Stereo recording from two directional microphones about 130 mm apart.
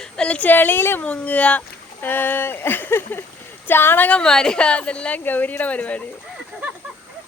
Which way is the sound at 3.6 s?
15° left (ahead or behind).